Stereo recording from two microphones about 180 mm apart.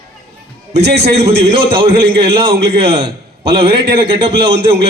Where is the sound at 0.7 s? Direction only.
65° right (ahead or behind).